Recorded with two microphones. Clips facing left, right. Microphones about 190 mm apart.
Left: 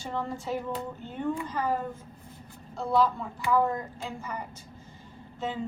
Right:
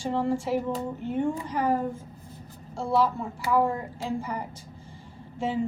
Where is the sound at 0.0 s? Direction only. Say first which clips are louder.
Right 7 dB; 30° right (ahead or behind).